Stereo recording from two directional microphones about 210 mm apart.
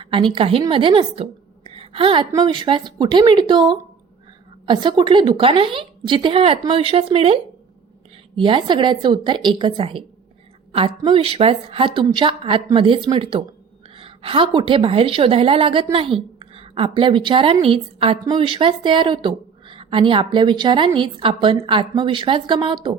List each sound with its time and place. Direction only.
0.0 s a woman's voice: 25° right (ahead or behind)
8.4 s a woman's voice: 25° right (ahead or behind)